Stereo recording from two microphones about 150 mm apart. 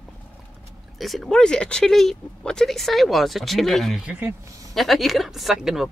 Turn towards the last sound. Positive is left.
turn(degrees=-5)  # may be behind; listen again after turning